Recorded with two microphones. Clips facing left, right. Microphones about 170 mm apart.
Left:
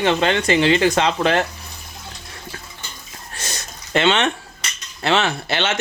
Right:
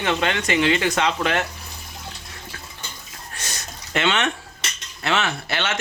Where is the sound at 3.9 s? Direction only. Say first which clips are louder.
Left 4 dB; 30° left (ahead or behind).